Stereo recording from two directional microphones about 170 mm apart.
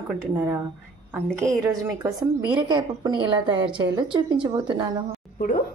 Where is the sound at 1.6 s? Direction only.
20° right (ahead or behind).